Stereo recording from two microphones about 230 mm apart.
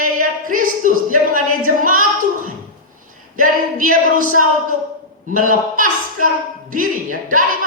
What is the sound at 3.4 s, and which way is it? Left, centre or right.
Speech, right.